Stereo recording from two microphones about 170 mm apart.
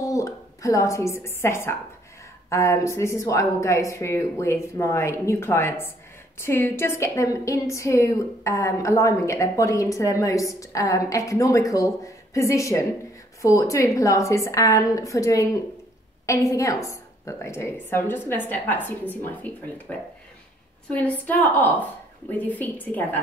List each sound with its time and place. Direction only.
0.0 s a woman's voice: 20° left (ahead or behind)